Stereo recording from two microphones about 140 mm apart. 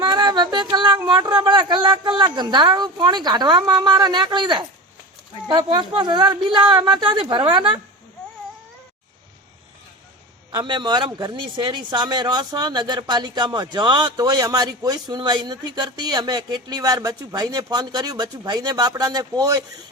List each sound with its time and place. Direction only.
0.0 s child singing: 30° right (ahead or behind)
1.0 s a man's voice: 30° right (ahead or behind)
10.5 s a man's voice: 35° right (ahead or behind)